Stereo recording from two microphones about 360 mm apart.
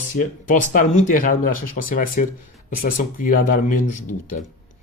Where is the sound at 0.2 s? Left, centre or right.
Left.